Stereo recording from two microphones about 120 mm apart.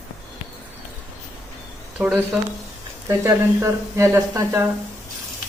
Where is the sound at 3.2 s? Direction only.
25° right (ahead or behind).